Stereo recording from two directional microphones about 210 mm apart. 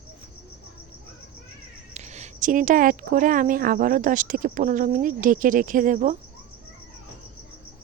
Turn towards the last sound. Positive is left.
turn(degrees=-35)  # may be behind; listen again after turning